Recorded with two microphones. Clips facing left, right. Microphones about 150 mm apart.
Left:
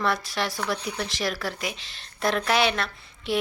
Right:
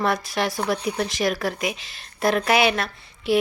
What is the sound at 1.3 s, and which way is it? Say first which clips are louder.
Speech: right 5 dB; 55° right (ahead or behind).